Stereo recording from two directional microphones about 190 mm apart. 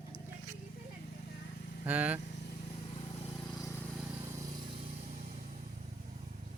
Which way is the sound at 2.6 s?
30° left (ahead or behind).